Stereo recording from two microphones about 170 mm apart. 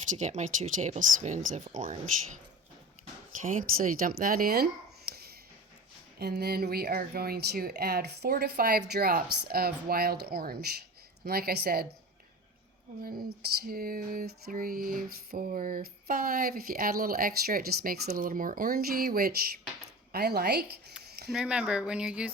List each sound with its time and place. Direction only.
0.1 s speech: 45° right (ahead or behind)
3.4 s speech: 50° right (ahead or behind)
6.1 s a sound: 70° right (ahead or behind)
13.6 s a sound: 60° right (ahead or behind)
20.1 s speech: 70° right (ahead or behind)
21.2 s speech: 5° right (ahead or behind)